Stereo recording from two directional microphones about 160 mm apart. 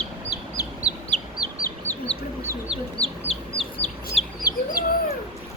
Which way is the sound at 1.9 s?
40° left (ahead or behind).